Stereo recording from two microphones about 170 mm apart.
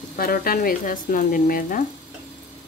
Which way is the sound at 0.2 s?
60° left (ahead or behind).